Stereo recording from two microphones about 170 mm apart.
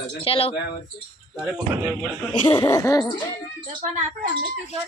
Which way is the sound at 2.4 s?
20° left (ahead or behind).